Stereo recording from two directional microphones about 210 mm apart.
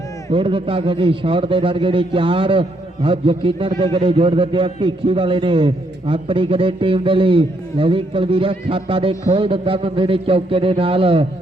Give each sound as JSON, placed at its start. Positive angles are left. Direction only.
{"t": 0.3, "sound": "a man's voice", "side_deg": -25}